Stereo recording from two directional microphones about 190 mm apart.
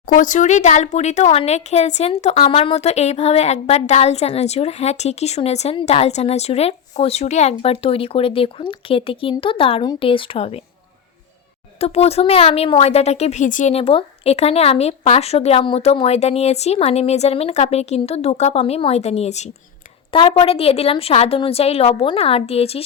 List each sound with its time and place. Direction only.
0.1 s a woman's voice: 45° left (ahead or behind)
11.8 s a woman's voice: 35° left (ahead or behind)